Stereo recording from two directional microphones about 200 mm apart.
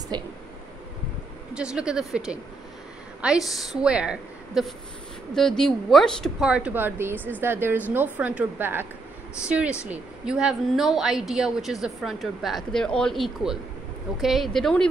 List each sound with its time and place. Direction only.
0.1 s speech: 20° right (ahead or behind)
1.5 s a woman's voice: 5° right (ahead or behind)